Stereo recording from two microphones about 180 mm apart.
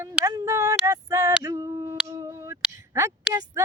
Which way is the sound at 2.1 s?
20° right (ahead or behind).